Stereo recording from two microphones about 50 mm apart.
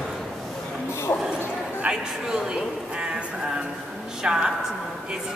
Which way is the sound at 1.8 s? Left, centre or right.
Centre.